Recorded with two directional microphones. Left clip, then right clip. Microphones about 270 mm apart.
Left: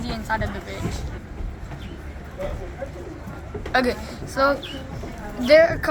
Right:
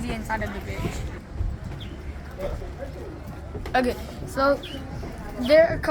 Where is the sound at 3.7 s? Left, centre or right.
Centre.